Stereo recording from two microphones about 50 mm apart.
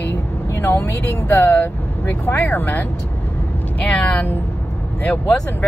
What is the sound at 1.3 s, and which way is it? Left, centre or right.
Speech, left.